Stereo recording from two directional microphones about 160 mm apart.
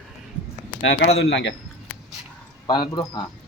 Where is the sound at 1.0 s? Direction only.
90° left.